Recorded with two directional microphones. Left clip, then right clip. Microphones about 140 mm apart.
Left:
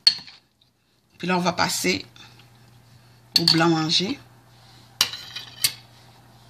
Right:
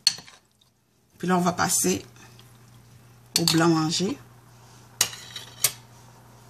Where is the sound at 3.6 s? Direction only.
30° left (ahead or behind).